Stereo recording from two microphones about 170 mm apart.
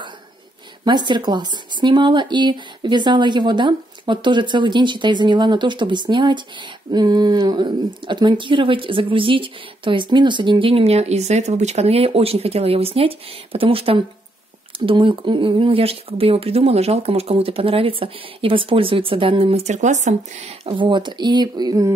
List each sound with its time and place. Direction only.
0.8 s speech: 25° right (ahead or behind)